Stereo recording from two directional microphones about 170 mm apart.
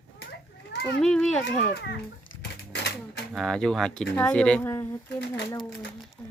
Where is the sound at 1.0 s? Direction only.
5° left (ahead or behind).